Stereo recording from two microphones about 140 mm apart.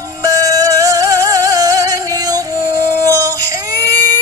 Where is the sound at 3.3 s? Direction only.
25° right (ahead or behind).